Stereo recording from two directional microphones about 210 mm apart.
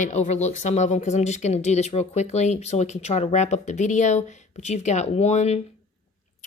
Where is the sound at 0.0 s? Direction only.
35° left (ahead or behind).